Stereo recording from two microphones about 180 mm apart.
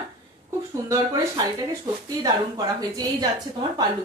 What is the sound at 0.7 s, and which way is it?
A woman's voice, 20° right (ahead or behind).